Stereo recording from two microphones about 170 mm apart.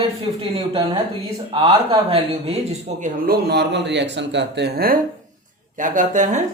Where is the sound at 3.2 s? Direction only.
65° right (ahead or behind).